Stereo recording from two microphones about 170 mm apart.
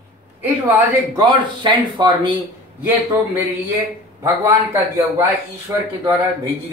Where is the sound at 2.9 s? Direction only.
10° right (ahead or behind).